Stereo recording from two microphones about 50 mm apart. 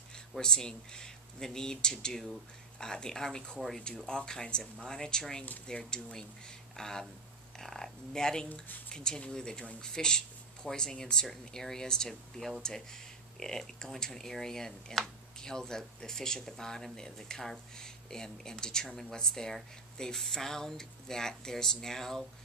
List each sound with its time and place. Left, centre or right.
0.4 s speech: centre